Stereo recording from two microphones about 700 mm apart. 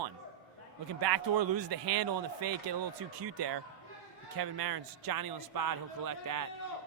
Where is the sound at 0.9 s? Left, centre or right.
Right.